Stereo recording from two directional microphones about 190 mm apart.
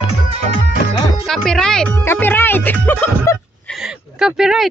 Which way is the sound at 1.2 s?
Centre (ahead or behind).